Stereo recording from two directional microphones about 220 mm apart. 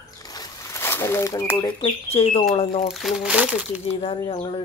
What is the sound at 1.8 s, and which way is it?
Speech, 25° left (ahead or behind).